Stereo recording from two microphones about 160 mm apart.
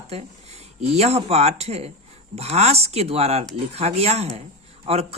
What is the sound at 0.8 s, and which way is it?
Speech, 40° right (ahead or behind).